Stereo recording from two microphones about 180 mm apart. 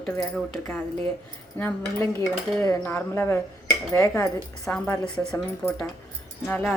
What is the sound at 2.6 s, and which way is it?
Speech, 15° left (ahead or behind).